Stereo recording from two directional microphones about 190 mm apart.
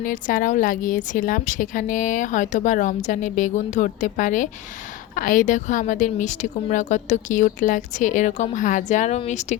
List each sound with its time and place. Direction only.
0.0 s a woman's voice: 45° left (ahead or behind)